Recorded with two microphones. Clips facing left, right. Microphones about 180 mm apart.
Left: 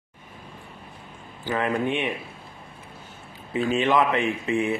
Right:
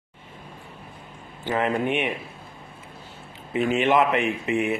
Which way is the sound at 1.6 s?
20° right (ahead or behind).